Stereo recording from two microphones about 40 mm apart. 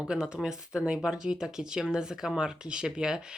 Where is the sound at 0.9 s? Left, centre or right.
Centre.